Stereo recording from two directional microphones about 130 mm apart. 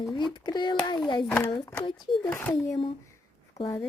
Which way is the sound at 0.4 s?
35° left (ahead or behind).